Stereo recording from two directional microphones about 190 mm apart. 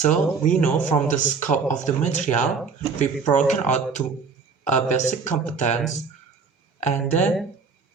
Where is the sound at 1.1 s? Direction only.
40° left (ahead or behind).